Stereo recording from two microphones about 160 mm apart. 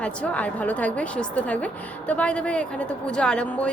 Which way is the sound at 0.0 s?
5° left (ahead or behind).